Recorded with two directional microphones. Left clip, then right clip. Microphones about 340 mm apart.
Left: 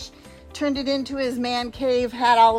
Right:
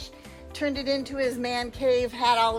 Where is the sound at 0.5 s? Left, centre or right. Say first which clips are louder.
Left 3 dB; left.